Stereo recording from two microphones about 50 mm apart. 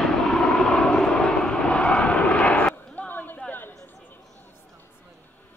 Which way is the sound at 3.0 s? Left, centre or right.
Left.